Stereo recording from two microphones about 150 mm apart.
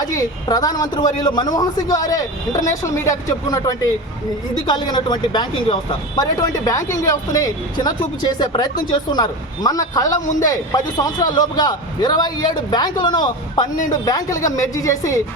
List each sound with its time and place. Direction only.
0.1 s speech: 25° left (ahead or behind)